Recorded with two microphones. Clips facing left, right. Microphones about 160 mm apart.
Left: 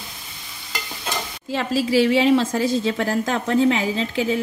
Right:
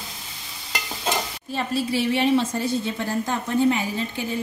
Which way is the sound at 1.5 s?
90° left.